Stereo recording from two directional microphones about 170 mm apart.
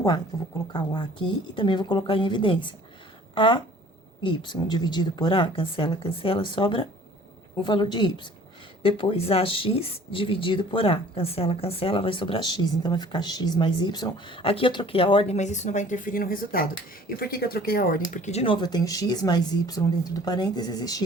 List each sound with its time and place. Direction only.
0.3 s speech: 20° left (ahead or behind); by 18.0 s 60° left (ahead or behind)
18.1 s speech: 40° left (ahead or behind); by 21.0 s 20° left (ahead or behind)